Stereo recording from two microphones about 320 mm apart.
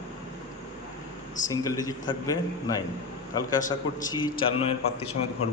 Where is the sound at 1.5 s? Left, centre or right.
Centre.